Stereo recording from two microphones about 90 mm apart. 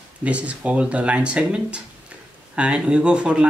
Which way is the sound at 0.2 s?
15° right (ahead or behind).